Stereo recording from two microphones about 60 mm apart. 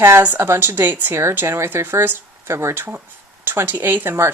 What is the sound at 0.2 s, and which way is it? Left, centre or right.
Speech, right.